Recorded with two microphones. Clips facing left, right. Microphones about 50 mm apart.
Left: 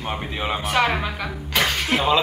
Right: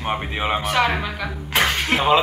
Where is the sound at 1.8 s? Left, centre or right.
Right.